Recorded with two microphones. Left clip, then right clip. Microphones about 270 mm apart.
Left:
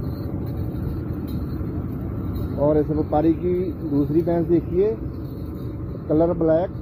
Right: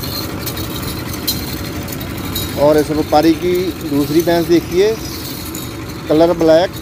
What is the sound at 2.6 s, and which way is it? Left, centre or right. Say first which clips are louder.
Speech: right 8 dB; centre.